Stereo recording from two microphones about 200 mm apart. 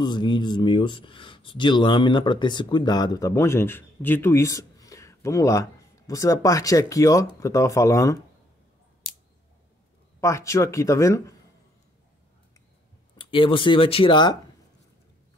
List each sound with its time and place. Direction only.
0.0 s speech: 20° left (ahead or behind)
10.2 s speech: 15° left (ahead or behind)
13.2 s speech: 25° left (ahead or behind)